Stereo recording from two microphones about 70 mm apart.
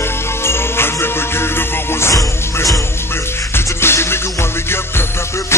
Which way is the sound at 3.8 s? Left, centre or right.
Left.